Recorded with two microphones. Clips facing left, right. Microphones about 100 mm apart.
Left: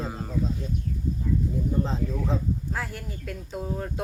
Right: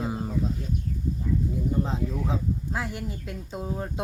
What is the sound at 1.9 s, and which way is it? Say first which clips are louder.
Speech: left 1 dB; 15° right (ahead or behind).